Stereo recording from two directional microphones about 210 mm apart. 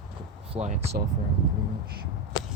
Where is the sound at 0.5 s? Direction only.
35° right (ahead or behind).